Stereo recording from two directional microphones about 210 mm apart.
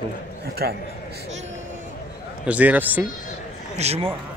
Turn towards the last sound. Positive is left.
turn(degrees=-30)  # may be behind; listen again after turning